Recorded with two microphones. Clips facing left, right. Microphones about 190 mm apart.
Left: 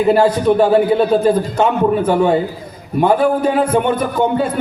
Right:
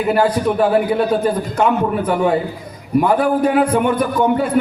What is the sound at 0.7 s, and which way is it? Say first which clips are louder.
A man's voice: left 3 dB; 25° left (ahead or behind).